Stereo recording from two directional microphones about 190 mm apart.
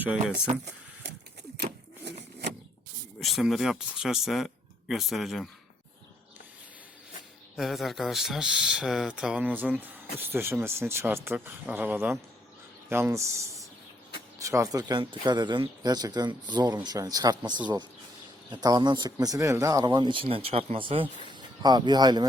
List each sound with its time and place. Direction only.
3.2 s speech: centre (ahead or behind)
7.5 s speech: centre (ahead or behind)
14.3 s speech: 15° right (ahead or behind)